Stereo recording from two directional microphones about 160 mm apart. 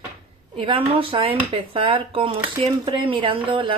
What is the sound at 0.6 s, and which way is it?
A woman's voice, 35° right (ahead or behind).